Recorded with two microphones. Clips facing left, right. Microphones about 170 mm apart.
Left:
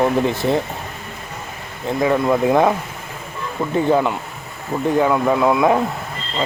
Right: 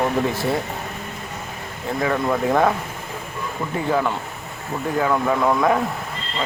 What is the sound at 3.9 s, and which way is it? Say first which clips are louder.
Speech: left 1 dB; 15° left (ahead or behind).